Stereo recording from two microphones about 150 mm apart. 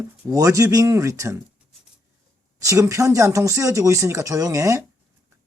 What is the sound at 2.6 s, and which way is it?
Speech, 20° right (ahead or behind).